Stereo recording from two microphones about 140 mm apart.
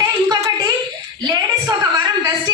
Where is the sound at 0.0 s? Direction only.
25° right (ahead or behind).